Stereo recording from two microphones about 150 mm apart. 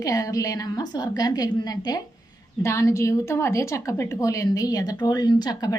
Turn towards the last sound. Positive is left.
turn(degrees=25)  # may be behind; listen again after turning